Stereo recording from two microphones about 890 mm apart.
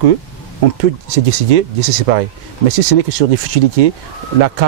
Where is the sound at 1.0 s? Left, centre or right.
Right.